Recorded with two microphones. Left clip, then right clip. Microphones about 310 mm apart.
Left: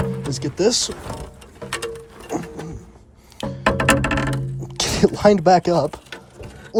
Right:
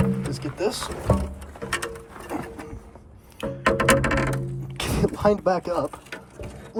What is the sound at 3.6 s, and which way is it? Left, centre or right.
Music, centre.